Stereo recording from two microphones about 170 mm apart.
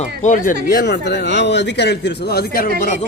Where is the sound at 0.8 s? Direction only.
90° left; by 2.7 s 60° left (ahead or behind).